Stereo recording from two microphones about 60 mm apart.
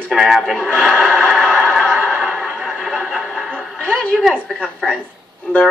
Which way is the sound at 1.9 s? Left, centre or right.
Centre.